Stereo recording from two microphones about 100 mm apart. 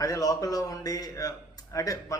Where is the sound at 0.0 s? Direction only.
35° left (ahead or behind).